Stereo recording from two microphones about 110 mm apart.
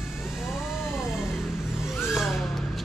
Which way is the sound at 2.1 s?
5° right (ahead or behind).